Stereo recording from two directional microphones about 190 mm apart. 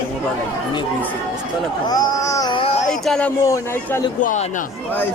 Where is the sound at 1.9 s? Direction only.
20° left (ahead or behind).